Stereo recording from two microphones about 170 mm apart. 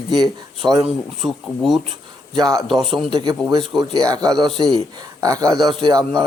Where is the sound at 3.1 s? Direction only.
25° right (ahead or behind).